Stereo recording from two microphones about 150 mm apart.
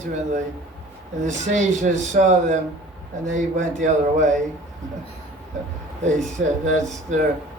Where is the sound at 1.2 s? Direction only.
50° right (ahead or behind).